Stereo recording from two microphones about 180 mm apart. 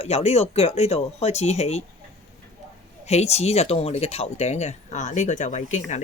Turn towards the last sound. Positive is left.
turn(degrees=40)  # may be behind; listen again after turning